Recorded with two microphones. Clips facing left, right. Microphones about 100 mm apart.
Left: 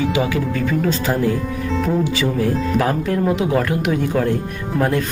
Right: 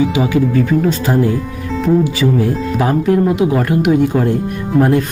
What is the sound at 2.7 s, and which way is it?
Speech, 15° right (ahead or behind).